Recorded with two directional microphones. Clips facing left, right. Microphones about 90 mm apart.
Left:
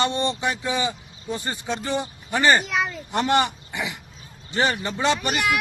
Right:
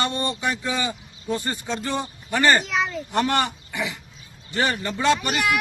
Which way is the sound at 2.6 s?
5° left (ahead or behind).